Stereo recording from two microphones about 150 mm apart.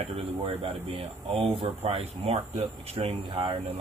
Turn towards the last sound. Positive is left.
turn(degrees=-40)  # may be behind; listen again after turning